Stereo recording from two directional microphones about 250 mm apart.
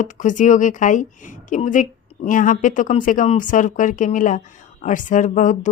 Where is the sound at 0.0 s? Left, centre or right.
Left.